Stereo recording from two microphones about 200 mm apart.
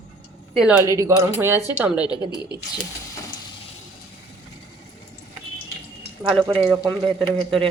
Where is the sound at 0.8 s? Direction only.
15° right (ahead or behind).